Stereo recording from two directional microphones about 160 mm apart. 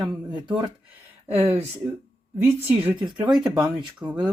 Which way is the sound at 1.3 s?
15° right (ahead or behind).